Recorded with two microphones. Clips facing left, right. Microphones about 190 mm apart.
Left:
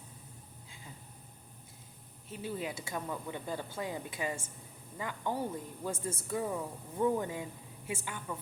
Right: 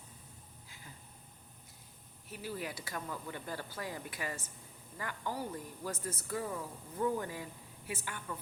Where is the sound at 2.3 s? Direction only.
25° left (ahead or behind).